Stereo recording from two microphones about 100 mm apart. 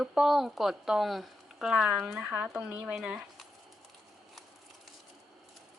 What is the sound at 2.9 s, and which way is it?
Speech, 5° right (ahead or behind).